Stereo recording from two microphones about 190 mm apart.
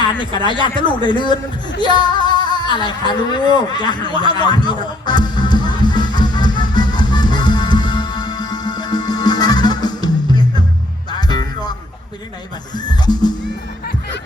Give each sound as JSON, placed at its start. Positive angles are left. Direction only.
{"t": 0.6, "sound": "a man's voice", "side_deg": 25}
{"t": 1.8, "sound": "singing", "side_deg": 25}
{"t": 11.2, "sound": "music", "side_deg": 20}
{"t": 12.7, "sound": "a man's voice", "side_deg": 20}